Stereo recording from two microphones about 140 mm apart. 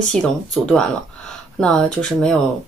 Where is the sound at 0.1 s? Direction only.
5° left (ahead or behind).